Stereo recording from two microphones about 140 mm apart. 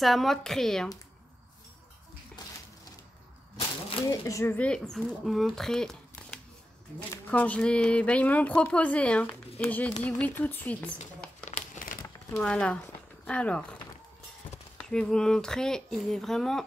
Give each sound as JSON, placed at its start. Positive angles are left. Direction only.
{"t": 0.0, "sound": "speech", "side_deg": 0}
{"t": 2.4, "sound": "a sound", "side_deg": 30}
{"t": 4.2, "sound": "speech", "side_deg": 20}
{"t": 4.6, "sound": "speech", "side_deg": 5}
{"t": 11.5, "sound": "crumpling", "side_deg": 65}
{"t": 12.4, "sound": "speech", "side_deg": 5}
{"t": 14.8, "sound": "speech", "side_deg": 5}